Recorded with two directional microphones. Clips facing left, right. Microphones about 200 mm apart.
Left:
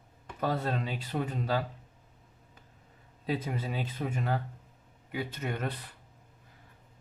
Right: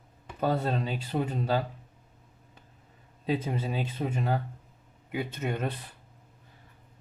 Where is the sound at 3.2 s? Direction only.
25° right (ahead or behind).